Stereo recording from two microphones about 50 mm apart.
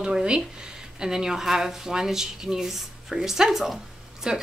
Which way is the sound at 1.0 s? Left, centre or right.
Centre.